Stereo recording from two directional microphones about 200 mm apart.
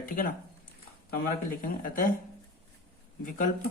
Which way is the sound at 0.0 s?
45° left (ahead or behind).